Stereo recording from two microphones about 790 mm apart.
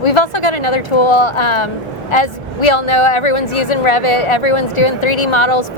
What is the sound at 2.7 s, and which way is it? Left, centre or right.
Speech, left.